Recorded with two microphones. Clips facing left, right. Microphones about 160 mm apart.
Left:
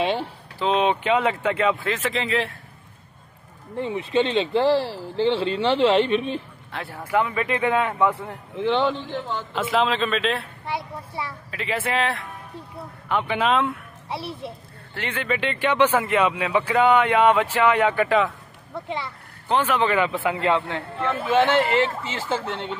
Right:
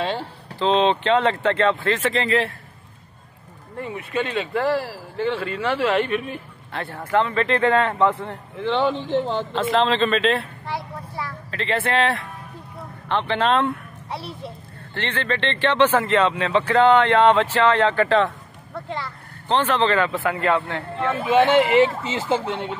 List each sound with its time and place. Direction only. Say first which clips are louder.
0.0 s speech: left 2 dB; 15° left (ahead or behind); by 2.5 s centre (ahead or behind)
3.7 s speech: left 4 dB; 25° left (ahead or behind)
6.7 s speech: right 2 dB; 5° left (ahead or behind)
10.7 s vehicle: left 1 dB; 25° left (ahead or behind)
11.5 s speech: right 3 dB; 5° left (ahead or behind)
15.0 s speech: right 1 dB; 10° left (ahead or behind)
18.9 s speech: even; 20° left (ahead or behind)
19.4 s speech: right 1 dB; 10° left (ahead or behind)
21.1 s speech: right 3 dB; 10° right (ahead or behind)